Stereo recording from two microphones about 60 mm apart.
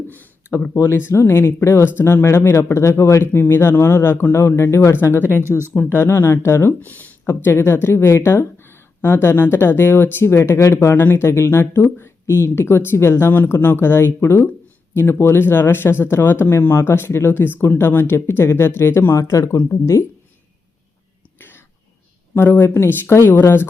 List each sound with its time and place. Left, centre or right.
0.1 s a sound: left
1.1 s speech: left
5.5 s speech: right
5.8 s speech: left
6.7 s speech: left
19.5 s speech: left
21.3 s whispering: left
22.4 s speech: left